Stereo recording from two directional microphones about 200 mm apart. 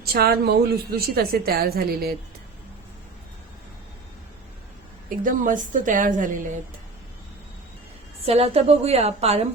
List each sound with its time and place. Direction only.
0.0 s a woman's voice: 50° right (ahead or behind)
5.0 s a woman's voice: 40° right (ahead or behind)
8.2 s a woman's voice: 30° right (ahead or behind)